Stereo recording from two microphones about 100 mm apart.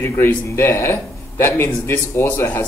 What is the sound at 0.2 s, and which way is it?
Speech, 25° left (ahead or behind).